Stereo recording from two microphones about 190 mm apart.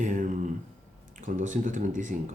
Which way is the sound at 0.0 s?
40° right (ahead or behind).